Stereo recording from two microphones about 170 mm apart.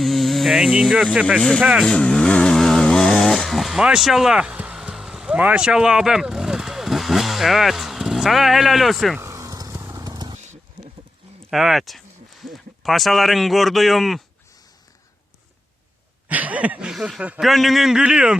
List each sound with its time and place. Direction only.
0.0 s speech: centre (ahead or behind)
1.4 s speech: 5° left (ahead or behind)
1.6 s vehicle: centre (ahead or behind)
9.2 s vehicle: 20° right (ahead or behind)
11.5 s speech: centre (ahead or behind)
16.3 s speech: 10° right (ahead or behind)